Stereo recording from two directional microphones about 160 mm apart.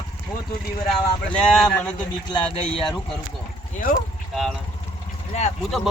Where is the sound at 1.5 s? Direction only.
5° left (ahead or behind).